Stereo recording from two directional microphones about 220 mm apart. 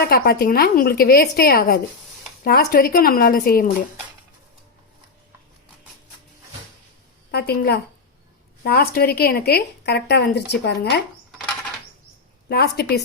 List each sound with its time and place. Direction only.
0.0 s a woman's voice: 45° left (ahead or behind)
7.3 s a woman's voice: 45° left (ahead or behind)
12.5 s a woman's voice: 45° left (ahead or behind)